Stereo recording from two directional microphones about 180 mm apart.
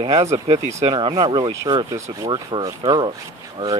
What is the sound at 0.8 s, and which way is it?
Speech, 25° right (ahead or behind).